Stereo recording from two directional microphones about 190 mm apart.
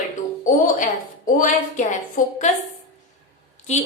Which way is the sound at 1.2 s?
45° left (ahead or behind).